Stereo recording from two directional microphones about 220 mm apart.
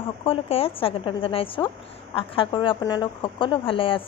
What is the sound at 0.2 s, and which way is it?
A woman's voice, 25° left (ahead or behind).